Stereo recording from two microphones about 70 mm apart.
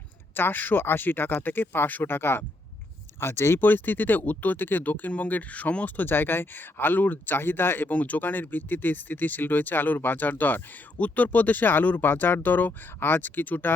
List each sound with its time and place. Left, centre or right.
0.3 s speech: left